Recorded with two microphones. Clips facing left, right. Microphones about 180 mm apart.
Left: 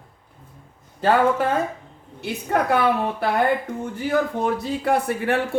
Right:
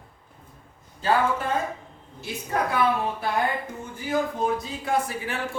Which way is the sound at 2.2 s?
65° left (ahead or behind).